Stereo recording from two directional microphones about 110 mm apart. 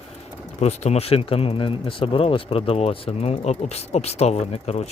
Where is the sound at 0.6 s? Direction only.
85° left.